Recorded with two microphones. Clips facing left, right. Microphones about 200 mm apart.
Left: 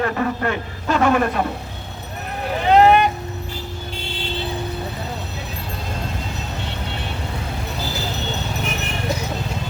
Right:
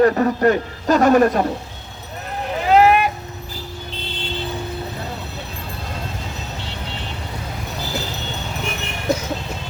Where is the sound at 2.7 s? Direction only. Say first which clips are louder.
Left 1 dB; 5° right (ahead or behind).